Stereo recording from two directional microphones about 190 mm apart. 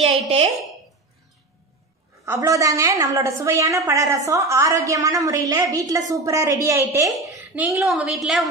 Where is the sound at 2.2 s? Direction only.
15° right (ahead or behind).